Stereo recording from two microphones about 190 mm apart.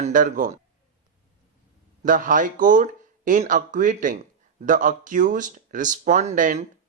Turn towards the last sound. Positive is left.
turn(degrees=-40)  # may be behind; listen again after turning